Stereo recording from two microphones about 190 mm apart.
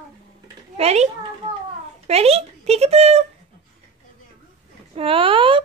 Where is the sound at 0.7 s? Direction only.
35° right (ahead or behind).